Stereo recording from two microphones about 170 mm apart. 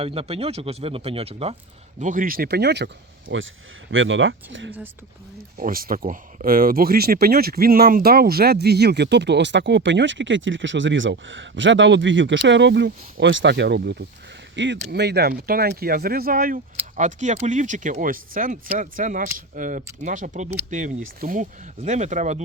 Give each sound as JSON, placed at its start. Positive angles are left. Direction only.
{"t": 0.0, "sound": "speech", "side_deg": -35}
{"t": 2.0, "sound": "speech", "side_deg": -50}
{"t": 3.3, "sound": "speech", "side_deg": -90}
{"t": 5.5, "sound": "speech", "side_deg": -55}
{"t": 14.5, "sound": "speech", "side_deg": -90}